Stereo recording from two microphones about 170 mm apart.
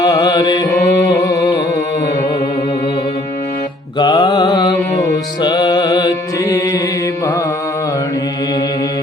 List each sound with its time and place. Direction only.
0.0 s carnatic music: 20° left (ahead or behind)
1.0 s music: 20° left (ahead or behind)
3.9 s music: 25° left (ahead or behind)